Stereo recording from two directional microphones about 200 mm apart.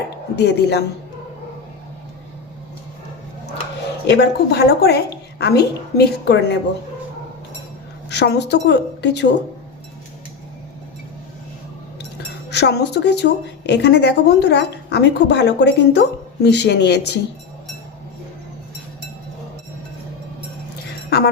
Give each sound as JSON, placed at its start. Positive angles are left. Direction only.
{"t": 0.3, "sound": "a woman's voice", "side_deg": 55}
{"t": 4.0, "sound": "a woman's voice", "side_deg": 55}
{"t": 8.1, "sound": "a woman's voice", "side_deg": 55}
{"t": 12.5, "sound": "a woman's voice", "side_deg": 55}
{"t": 21.1, "sound": "music", "side_deg": 55}